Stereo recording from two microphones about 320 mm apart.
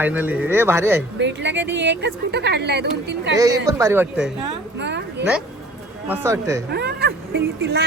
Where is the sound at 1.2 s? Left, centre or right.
Right.